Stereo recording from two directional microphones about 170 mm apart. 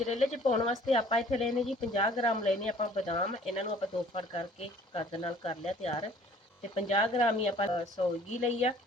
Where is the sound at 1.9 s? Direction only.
25° left (ahead or behind).